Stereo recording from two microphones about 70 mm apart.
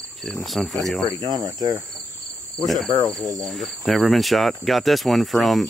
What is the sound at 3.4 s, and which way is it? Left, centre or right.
Cricket, centre.